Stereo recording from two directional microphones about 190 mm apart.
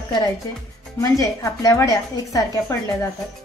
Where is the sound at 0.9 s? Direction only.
15° left (ahead or behind).